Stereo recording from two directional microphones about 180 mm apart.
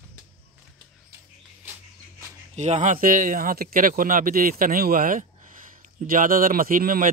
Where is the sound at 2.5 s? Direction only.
40° right (ahead or behind).